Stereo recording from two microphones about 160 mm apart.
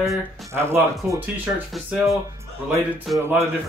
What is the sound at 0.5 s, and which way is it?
Speech, 15° right (ahead or behind).